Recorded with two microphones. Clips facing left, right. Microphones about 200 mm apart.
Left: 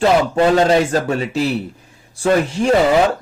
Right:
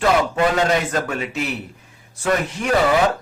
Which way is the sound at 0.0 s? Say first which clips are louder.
Left 4 dB; 30° left (ahead or behind).